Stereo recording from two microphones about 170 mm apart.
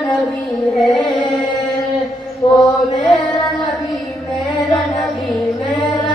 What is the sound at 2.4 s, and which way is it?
Chant, 25° left (ahead or behind).